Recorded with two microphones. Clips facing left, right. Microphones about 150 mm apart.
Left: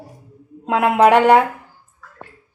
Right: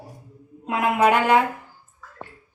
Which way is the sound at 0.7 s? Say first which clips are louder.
Left 6 dB; 75° left (ahead or behind).